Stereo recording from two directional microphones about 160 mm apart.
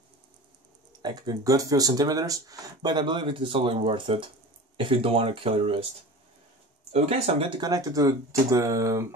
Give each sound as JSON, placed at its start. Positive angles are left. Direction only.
{"t": 1.0, "sound": "speech", "side_deg": -25}
{"t": 6.9, "sound": "speech", "side_deg": -40}
{"t": 7.6, "sound": "speech", "side_deg": -20}